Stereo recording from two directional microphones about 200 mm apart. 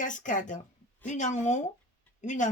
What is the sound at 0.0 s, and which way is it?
Speech, 40° left (ahead or behind).